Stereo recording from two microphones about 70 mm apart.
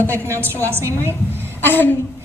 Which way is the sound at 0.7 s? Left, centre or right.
Right.